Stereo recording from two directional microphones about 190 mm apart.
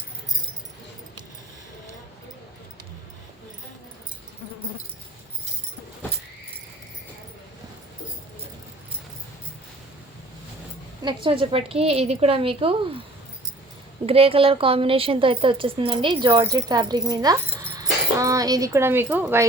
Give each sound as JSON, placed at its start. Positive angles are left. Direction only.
{"t": 11.0, "sound": "speech", "side_deg": -25}
{"t": 14.1, "sound": "speech", "side_deg": -30}